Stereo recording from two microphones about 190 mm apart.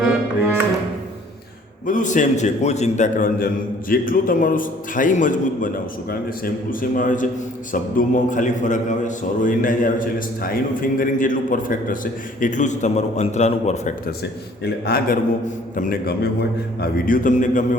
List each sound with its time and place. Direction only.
1.9 s a man's voice: 40° left (ahead or behind)
14.6 s a man's voice: 55° left (ahead or behind)